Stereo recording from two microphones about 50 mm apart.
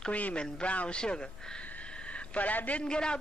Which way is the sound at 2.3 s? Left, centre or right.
Left.